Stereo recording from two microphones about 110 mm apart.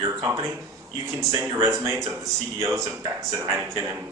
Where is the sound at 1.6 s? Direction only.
25° right (ahead or behind).